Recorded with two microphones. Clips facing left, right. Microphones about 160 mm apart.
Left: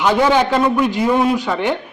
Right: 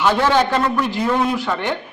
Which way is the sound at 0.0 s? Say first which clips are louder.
Left 2 dB; 15° left (ahead or behind).